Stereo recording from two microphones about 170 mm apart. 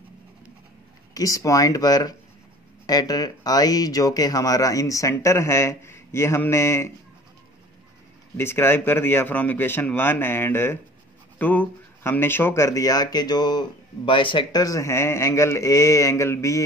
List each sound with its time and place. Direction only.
1.1 s speech: 20° left (ahead or behind)
8.4 s speech: 15° left (ahead or behind)